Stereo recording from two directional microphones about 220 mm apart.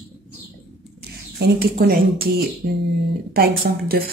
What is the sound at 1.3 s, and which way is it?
Speech, 45° right (ahead or behind).